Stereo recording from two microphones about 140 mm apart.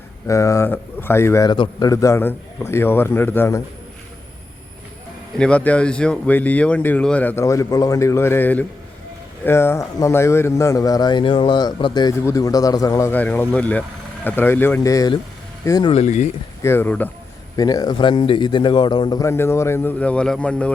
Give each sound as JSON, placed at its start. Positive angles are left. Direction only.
{"t": 0.3, "sound": "a man's voice", "side_deg": 20}
{"t": 1.5, "sound": "speech", "side_deg": 35}
{"t": 1.9, "sound": "speech", "side_deg": 20}
{"t": 5.4, "sound": "a man's voice", "side_deg": 10}
{"t": 12.2, "sound": "a man's voice", "side_deg": 25}
{"t": 15.9, "sound": "speech", "side_deg": 50}
{"t": 16.6, "sound": "speech", "side_deg": 15}
{"t": 17.6, "sound": "speech", "side_deg": 25}
{"t": 19.2, "sound": "speech", "side_deg": 20}